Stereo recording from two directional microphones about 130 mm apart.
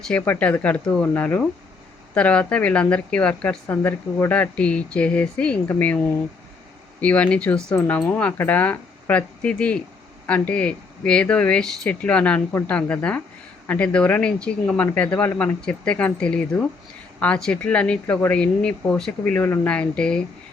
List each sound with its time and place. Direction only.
0.2 s a woman's voice: 15° left (ahead or behind)
15.6 s a woman's voice: 10° left (ahead or behind)